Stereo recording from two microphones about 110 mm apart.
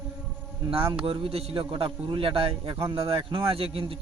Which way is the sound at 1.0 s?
55° right (ahead or behind).